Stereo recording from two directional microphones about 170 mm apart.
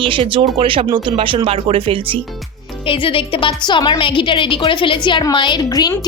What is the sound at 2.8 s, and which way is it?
Speech, 30° left (ahead or behind).